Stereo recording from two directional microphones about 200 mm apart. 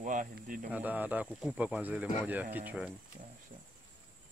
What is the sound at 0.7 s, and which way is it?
Speech, 10° right (ahead or behind).